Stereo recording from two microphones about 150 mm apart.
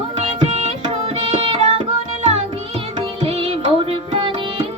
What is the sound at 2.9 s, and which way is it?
Music, 40° right (ahead or behind).